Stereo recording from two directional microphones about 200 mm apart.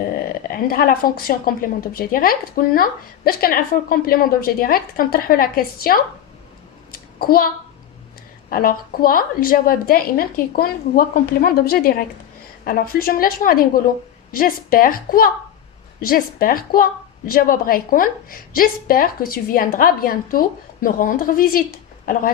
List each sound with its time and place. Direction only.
0.4 s speech: 45° left (ahead or behind)
6.9 s a sound: 45° left (ahead or behind)
8.4 s speech: 45° left (ahead or behind)